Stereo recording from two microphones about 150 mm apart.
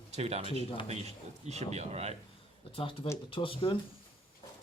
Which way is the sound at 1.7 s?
45° right (ahead or behind).